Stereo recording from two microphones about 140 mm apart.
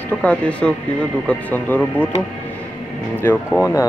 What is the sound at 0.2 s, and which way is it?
Speech, 10° left (ahead or behind).